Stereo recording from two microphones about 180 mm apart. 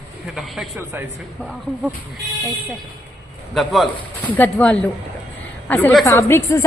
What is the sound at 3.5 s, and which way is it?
A woman's voice, centre (ahead or behind).